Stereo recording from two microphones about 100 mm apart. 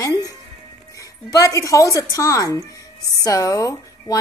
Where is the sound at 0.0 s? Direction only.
40° left (ahead or behind).